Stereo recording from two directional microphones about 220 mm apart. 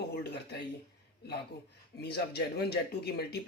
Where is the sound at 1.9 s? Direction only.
50° left (ahead or behind).